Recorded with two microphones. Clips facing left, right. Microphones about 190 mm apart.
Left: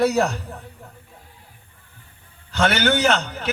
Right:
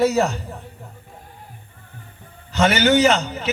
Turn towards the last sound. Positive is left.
turn(degrees=-10)  # may be behind; listen again after turning